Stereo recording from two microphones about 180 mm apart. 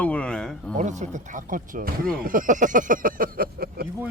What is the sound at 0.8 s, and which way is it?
Speech, 40° right (ahead or behind).